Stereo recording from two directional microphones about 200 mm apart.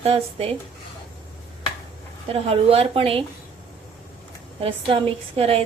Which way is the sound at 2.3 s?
30° right (ahead or behind).